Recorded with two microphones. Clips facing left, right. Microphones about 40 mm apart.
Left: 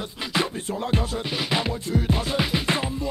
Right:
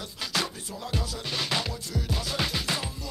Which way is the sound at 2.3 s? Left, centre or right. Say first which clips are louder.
Left 3 dB; centre.